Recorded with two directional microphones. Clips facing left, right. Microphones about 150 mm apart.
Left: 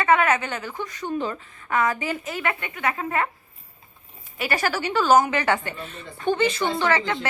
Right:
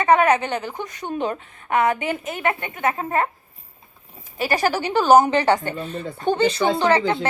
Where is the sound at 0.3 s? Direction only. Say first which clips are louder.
Right 4 dB; 25° right (ahead or behind).